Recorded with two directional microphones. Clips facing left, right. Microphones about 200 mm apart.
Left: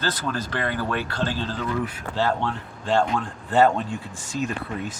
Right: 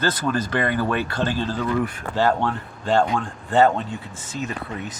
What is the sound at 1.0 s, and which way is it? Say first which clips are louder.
Speech: right 3 dB; 50° right (ahead or behind).